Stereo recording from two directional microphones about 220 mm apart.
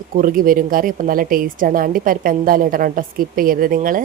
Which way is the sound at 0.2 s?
40° right (ahead or behind).